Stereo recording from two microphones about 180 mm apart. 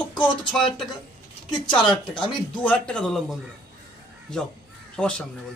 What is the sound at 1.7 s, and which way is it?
Speech, 25° left (ahead or behind).